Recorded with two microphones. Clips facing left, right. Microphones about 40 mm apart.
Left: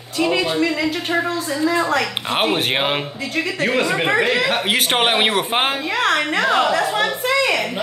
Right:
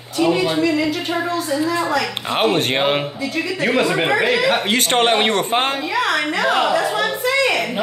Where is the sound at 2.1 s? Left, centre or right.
Centre.